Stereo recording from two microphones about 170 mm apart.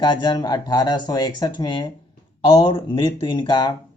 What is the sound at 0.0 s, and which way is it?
Speech, 25° left (ahead or behind).